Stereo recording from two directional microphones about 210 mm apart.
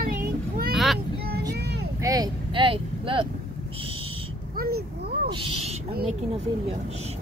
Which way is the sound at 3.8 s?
25° right (ahead or behind).